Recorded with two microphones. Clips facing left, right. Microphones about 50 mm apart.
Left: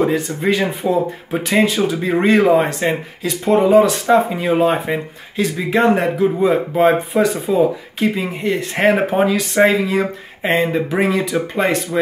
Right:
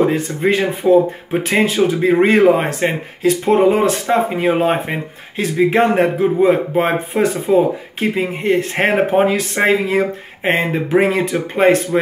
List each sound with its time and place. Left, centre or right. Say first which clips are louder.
0.1 s speech: right 1 dB; right
6.1 s speech: right 2 dB; right
7.2 s speech: right 1 dB; right